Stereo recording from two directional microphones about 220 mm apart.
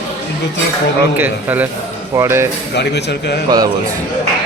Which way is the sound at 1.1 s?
10° right (ahead or behind).